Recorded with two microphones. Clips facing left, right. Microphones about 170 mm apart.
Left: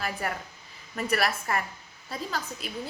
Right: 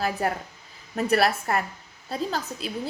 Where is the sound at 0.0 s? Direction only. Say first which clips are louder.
Right 6 dB; 35° right (ahead or behind).